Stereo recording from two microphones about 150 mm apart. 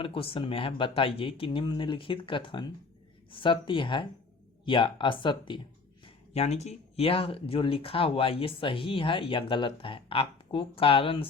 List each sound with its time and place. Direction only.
0.0 s speech: 40° left (ahead or behind)
6.1 s speech: 45° left (ahead or behind)